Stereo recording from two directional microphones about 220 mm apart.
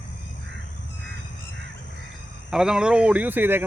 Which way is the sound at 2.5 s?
5° right (ahead or behind).